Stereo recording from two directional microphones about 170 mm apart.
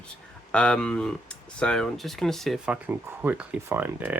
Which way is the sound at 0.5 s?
5° left (ahead or behind).